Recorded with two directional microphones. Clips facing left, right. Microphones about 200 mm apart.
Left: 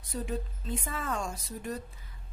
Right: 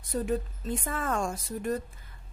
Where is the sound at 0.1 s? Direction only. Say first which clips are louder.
Right 6 dB; 55° right (ahead or behind).